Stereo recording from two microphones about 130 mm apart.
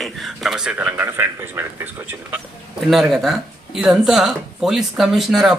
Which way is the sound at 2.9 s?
5° right (ahead or behind).